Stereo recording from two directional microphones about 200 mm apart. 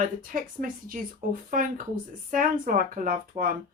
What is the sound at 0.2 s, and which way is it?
A woman's voice, 40° right (ahead or behind).